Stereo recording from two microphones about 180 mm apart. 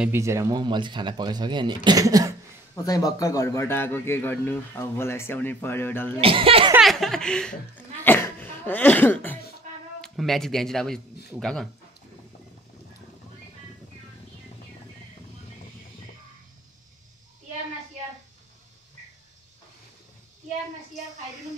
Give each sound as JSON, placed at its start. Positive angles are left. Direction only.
{"t": 0.0, "sound": "speech", "side_deg": -15}
{"t": 2.7, "sound": "a man's voice", "side_deg": 20}
{"t": 6.2, "sound": "speech", "side_deg": -30}
{"t": 6.8, "sound": "speech", "side_deg": 0}